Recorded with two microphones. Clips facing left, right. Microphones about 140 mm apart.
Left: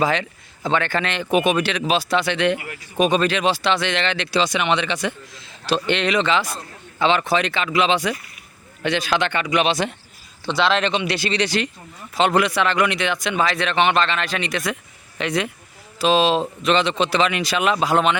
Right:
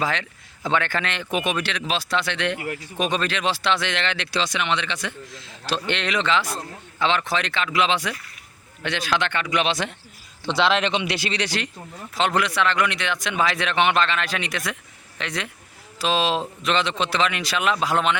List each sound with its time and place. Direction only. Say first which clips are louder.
0.0 s speech: left 5 dB; 5° left (ahead or behind)
10.5 s speech: left 1 dB; 20° right (ahead or behind); by 14.8 s centre (ahead or behind)
15.2 s speech: left 8 dB; 10° left (ahead or behind)
16.0 s speech: left 5 dB; centre (ahead or behind)